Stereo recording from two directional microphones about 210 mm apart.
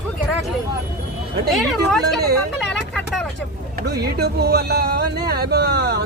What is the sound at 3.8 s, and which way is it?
Speech, 50° right (ahead or behind).